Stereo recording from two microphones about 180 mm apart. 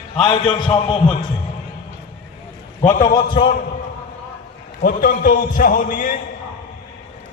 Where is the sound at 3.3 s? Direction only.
30° left (ahead or behind).